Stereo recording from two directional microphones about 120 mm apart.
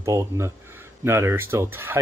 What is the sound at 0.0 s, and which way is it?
Speech, 25° right (ahead or behind).